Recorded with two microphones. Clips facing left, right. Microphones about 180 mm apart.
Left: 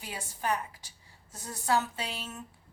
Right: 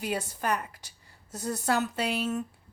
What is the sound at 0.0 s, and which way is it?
A woman's voice, 65° right (ahead or behind).